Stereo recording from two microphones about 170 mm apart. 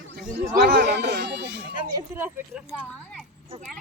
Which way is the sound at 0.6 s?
80° right.